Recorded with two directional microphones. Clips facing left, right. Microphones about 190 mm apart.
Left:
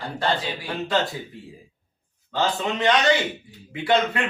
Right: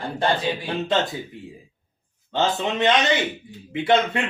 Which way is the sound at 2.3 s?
25° right (ahead or behind).